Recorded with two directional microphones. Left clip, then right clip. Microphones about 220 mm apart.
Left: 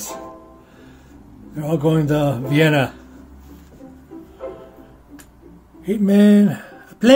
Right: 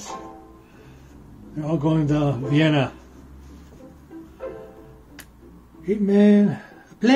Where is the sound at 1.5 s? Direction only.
30° left (ahead or behind).